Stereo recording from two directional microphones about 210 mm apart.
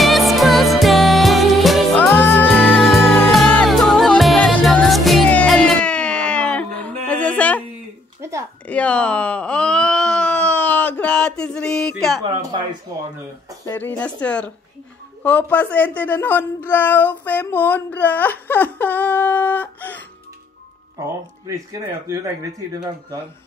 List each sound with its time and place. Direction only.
0.0 s music: centre (ahead or behind)
8.2 s a sound: 15° right (ahead or behind)
8.6 s wail: 5° left (ahead or behind)
13.7 s a woman's voice: 10° left (ahead or behind)
22.0 s speech: 15° right (ahead or behind)